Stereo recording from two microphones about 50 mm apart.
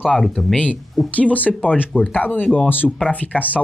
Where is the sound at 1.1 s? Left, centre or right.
Left.